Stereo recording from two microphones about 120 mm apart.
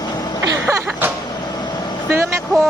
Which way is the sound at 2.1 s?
20° right (ahead or behind).